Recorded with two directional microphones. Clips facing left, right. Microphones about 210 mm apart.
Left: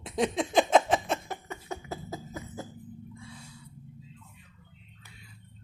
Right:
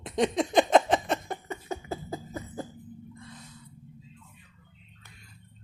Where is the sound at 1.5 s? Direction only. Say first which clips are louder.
Right 4 dB; 30° right (ahead or behind).